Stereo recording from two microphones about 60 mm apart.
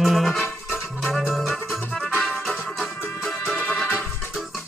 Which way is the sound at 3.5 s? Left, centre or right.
Left.